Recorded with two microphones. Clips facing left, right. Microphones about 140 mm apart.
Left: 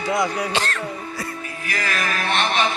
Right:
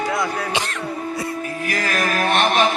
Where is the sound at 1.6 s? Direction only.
40° right (ahead or behind).